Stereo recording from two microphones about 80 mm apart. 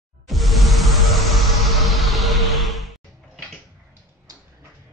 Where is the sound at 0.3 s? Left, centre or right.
Centre.